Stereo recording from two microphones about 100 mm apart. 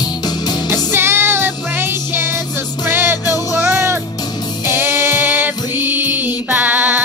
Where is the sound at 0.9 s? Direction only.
25° right (ahead or behind).